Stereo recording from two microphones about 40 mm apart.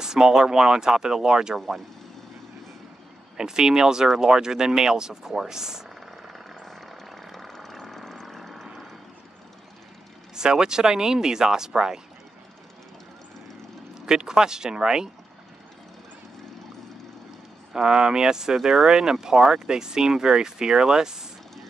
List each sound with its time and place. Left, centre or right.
0.0 s speech: centre
3.3 s speech: centre
6.6 s vehicle: centre
10.3 s speech: centre
14.0 s speech: centre
17.7 s speech: centre